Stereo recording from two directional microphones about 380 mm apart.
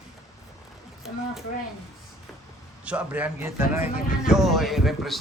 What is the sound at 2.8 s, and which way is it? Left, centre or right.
A man's voice, centre.